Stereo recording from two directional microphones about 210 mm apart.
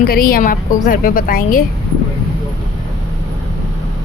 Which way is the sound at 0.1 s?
45° left (ahead or behind).